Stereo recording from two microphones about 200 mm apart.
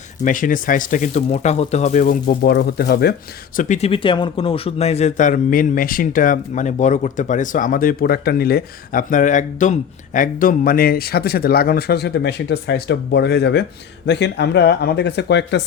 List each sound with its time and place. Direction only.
0.3 s a man's voice: 40° left (ahead or behind)
3.6 s a man's voice: 35° left (ahead or behind); by 15.6 s 60° left (ahead or behind)